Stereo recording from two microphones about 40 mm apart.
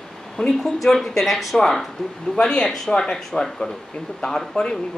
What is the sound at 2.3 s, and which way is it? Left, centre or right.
Speech, left.